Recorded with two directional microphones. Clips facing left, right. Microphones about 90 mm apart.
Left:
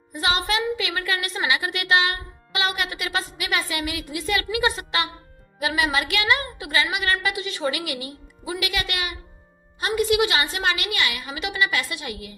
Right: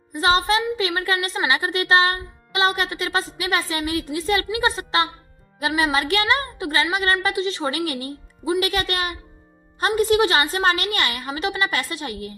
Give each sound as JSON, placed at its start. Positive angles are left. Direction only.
{"t": 0.2, "sound": "a woman's voice", "side_deg": -35}